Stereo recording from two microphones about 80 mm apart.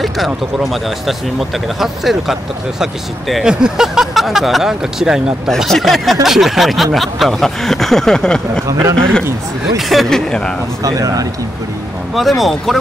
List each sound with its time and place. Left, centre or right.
0.0 s speech: centre
8.6 s speech: right
9.8 s speech: centre
10.8 s speech: right
12.2 s speech: centre